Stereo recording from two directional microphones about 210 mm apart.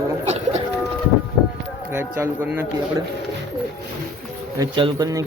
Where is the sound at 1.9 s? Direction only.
10° right (ahead or behind).